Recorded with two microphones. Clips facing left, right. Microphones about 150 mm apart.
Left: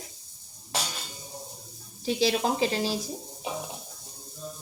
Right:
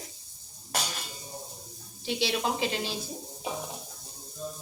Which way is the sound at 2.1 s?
40° left (ahead or behind).